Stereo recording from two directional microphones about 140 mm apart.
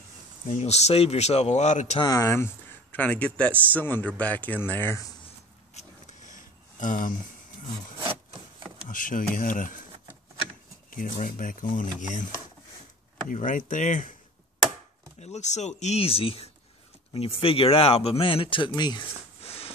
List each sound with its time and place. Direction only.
0.5 s speech: 55° left (ahead or behind)
2.0 s speech: 25° left (ahead or behind)
5.8 s a sound: 60° left (ahead or behind)
8.8 s speech: 70° left (ahead or behind)
10.9 s speech: 75° left (ahead or behind)
13.3 s speech: 70° left (ahead or behind)
15.1 s speech: 55° left (ahead or behind); by 19.0 s 30° left (ahead or behind)
19.4 s a sound: 45° left (ahead or behind)